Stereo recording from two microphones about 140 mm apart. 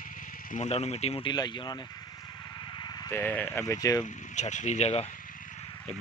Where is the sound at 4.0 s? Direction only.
60° left (ahead or behind).